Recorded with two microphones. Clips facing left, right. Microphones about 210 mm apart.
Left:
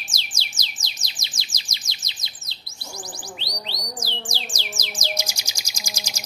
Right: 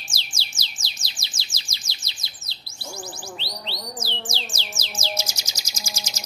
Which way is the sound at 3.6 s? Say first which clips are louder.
Right 2 dB; 15° left (ahead or behind).